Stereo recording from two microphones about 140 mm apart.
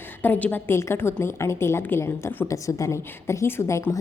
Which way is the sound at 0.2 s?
10° left (ahead or behind).